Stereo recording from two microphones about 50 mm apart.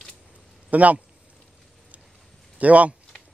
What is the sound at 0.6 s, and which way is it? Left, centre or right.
Speech, right.